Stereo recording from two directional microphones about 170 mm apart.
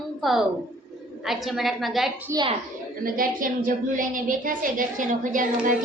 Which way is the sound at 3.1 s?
55° right (ahead or behind).